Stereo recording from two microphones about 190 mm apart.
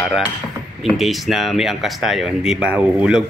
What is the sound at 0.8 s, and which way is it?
Speech, centre (ahead or behind).